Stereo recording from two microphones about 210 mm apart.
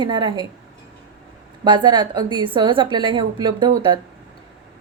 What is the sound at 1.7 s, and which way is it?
A woman's voice, 20° right (ahead or behind).